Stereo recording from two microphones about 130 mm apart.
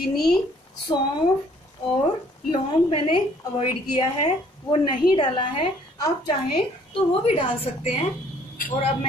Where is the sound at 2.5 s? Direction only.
40° left (ahead or behind).